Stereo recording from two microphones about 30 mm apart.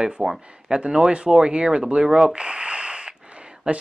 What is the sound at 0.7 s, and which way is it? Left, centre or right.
Speech, right.